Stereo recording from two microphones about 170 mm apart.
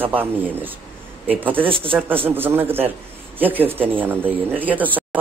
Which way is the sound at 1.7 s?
30° right (ahead or behind).